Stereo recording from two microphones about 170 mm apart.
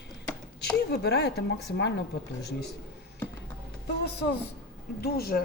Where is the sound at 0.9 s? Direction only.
75° left (ahead or behind).